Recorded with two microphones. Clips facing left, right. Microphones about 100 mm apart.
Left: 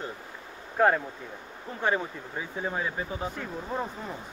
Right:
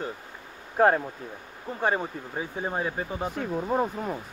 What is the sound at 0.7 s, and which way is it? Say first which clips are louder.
Speech: right 2 dB; 35° right (ahead or behind).